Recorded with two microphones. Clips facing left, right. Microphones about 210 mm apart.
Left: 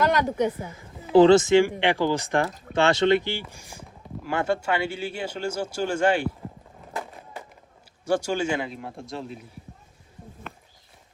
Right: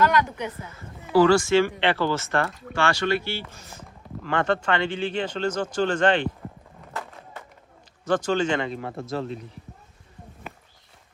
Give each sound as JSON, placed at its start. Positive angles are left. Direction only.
{"t": 0.2, "sound": "speech", "side_deg": 45}
{"t": 0.7, "sound": "speech", "side_deg": 20}
{"t": 8.0, "sound": "speech", "side_deg": 10}